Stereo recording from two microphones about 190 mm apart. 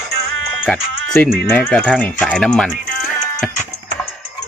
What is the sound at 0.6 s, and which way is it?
Speech, 5° left (ahead or behind).